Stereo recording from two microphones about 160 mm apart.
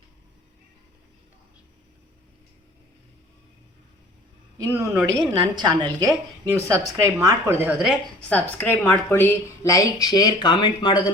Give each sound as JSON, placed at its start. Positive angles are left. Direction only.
{"t": 4.5, "sound": "a woman's voice", "side_deg": -20}
{"t": 5.2, "sound": "a woman's voice", "side_deg": -30}
{"t": 8.3, "sound": "a woman's voice", "side_deg": 10}